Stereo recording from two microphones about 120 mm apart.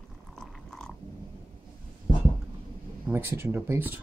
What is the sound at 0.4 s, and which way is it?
Cat, 5° left (ahead or behind).